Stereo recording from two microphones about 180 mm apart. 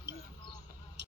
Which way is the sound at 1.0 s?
70° right (ahead or behind).